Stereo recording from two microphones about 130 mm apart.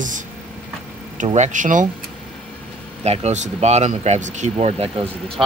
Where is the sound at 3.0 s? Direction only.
55° right (ahead or behind).